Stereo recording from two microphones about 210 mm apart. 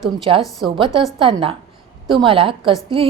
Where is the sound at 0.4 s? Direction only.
Centre (ahead or behind).